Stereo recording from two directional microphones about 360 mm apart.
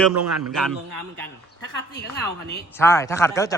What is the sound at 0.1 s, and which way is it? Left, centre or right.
Speech, right.